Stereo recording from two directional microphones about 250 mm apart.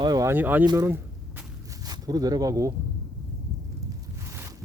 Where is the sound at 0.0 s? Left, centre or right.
Centre.